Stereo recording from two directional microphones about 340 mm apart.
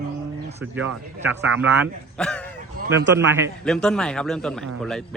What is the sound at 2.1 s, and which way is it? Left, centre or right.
Speech, centre.